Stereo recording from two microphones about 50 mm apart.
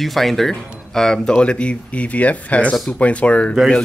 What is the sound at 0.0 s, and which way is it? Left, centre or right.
Speech, centre.